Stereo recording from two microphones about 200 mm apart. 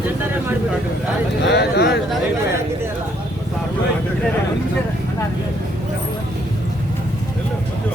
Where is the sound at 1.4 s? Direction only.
55° left (ahead or behind).